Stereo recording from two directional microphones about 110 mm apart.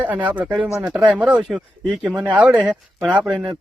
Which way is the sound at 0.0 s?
15° right (ahead or behind).